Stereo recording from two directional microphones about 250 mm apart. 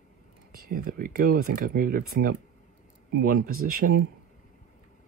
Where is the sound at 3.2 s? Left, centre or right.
Right.